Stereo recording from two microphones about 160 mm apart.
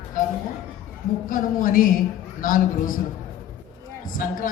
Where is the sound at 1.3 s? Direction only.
60° left (ahead or behind).